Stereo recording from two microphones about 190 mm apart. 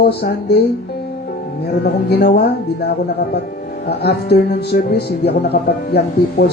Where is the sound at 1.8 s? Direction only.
60° left (ahead or behind).